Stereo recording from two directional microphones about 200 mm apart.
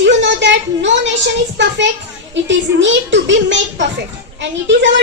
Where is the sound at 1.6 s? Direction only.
65° right (ahead or behind).